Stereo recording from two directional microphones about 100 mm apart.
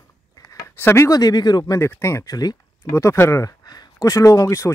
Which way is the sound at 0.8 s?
25° left (ahead or behind).